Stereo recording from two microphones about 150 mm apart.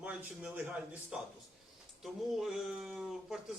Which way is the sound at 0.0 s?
10° right (ahead or behind).